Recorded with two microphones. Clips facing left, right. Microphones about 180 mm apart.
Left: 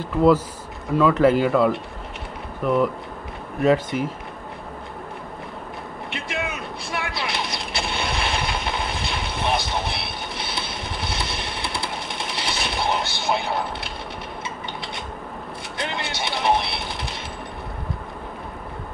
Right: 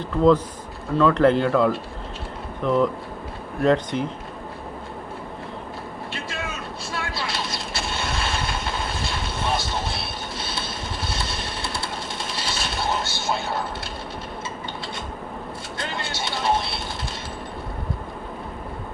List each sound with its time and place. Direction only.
0.0 s speech: 10° left (ahead or behind)
6.0 s vehicle: 20° left (ahead or behind)
10.0 s a sound: 20° left (ahead or behind)
15.8 s music: 20° left (ahead or behind)